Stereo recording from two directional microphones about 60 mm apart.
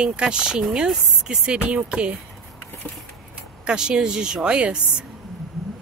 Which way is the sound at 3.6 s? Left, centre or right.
Centre.